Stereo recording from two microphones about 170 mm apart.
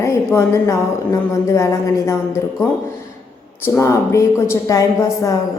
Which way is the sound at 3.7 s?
15° left (ahead or behind).